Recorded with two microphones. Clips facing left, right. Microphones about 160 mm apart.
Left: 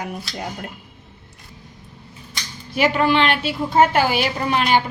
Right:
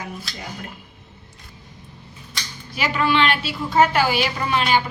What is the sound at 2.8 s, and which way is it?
A woman's voice, 50° left (ahead or behind).